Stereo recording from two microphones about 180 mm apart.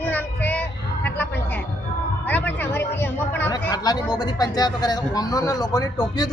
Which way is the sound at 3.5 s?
20° left (ahead or behind).